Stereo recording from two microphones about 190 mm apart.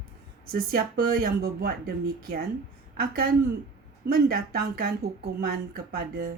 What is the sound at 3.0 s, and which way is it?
Speech, 55° right (ahead or behind).